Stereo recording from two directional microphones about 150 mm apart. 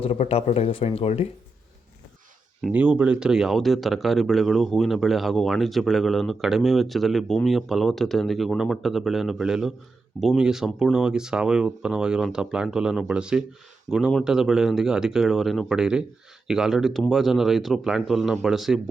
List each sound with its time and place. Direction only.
0.0 s speech: 40° left (ahead or behind)
2.6 s speech: 5° right (ahead or behind)